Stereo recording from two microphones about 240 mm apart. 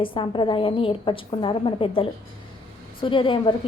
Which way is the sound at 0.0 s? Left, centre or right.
Left.